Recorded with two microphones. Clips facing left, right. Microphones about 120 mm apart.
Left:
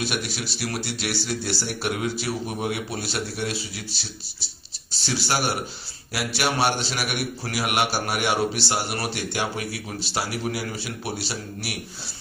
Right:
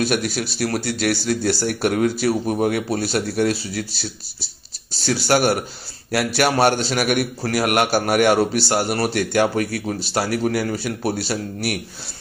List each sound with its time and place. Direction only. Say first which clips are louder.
0.0 s speech: right 8 dB; 45° right (ahead or behind)
4.9 s speech: right 8 dB; 45° right (ahead or behind)